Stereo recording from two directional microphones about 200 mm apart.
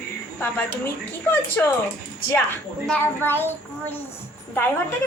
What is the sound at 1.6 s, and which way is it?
A child's voice, 10° left (ahead or behind).